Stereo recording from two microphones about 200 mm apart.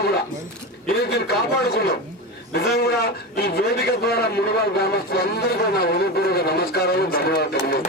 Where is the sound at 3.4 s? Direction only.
50° left (ahead or behind).